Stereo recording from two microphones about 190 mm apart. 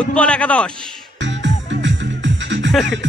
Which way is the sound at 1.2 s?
70° right (ahead or behind).